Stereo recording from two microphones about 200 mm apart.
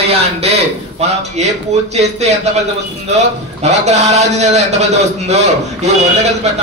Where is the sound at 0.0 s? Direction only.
30° right (ahead or behind).